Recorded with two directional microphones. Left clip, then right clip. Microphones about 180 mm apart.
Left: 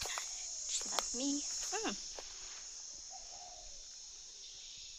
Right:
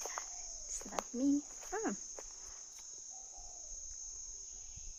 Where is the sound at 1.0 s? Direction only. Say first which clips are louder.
Left 1 dB; 5° left (ahead or behind).